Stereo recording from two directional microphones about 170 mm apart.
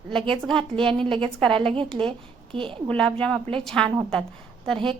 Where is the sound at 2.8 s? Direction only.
5° left (ahead or behind).